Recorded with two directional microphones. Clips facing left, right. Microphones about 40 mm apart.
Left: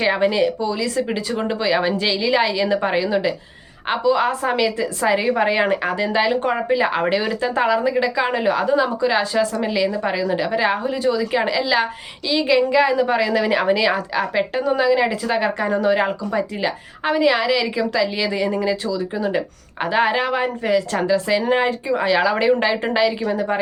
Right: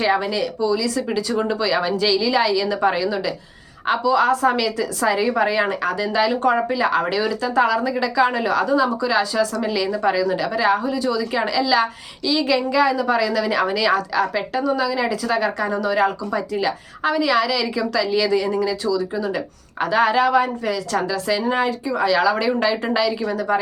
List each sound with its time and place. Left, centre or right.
0.2 s speech: left